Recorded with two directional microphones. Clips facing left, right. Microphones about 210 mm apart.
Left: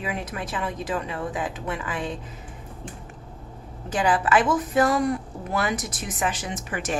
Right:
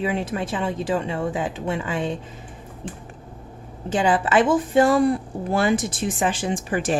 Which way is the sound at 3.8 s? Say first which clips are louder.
Right 2 dB; 25° right (ahead or behind).